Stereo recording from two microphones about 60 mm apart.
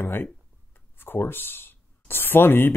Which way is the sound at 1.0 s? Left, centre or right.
Left.